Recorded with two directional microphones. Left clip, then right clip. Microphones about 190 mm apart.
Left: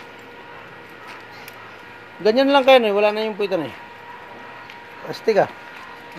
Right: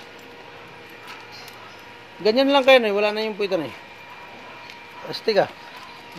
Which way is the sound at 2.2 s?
10° left (ahead or behind).